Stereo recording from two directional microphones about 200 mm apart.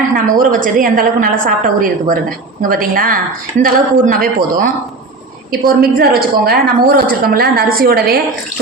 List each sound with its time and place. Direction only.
0.3 s a woman's voice: 45° right (ahead or behind)